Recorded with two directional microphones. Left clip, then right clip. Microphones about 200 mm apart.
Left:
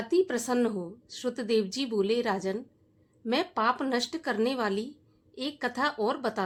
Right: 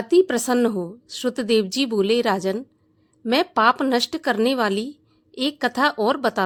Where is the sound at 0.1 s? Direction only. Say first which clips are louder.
Right 9 dB; 40° right (ahead or behind).